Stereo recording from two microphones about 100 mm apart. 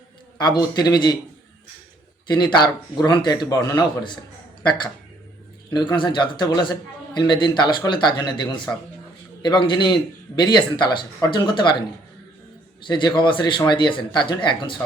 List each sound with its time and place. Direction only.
0.3 s a man's voice: 45° left (ahead or behind)
2.2 s a man's voice: 45° left (ahead or behind)
5.7 s a man's voice: 50° left (ahead or behind)
12.9 s a man's voice: 50° left (ahead or behind)